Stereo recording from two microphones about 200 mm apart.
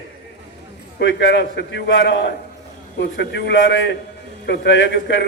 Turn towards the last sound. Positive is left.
turn(degrees=65)  # may be behind; listen again after turning